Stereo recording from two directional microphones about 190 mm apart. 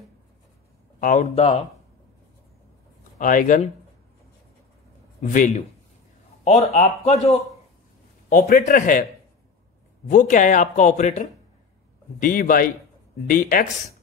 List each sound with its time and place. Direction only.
1.0 s speech: 40° left (ahead or behind)
3.2 s a man's voice: 45° left (ahead or behind)
5.2 s speech: 40° left (ahead or behind)
6.7 s speech: 35° left (ahead or behind)
8.3 s a man's voice: 45° left (ahead or behind)
10.0 s a man's voice: 45° left (ahead or behind)